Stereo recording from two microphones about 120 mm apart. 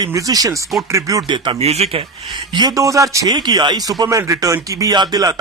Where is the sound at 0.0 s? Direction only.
30° right (ahead or behind).